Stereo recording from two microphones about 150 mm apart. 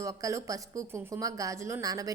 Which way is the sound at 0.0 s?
20° right (ahead or behind).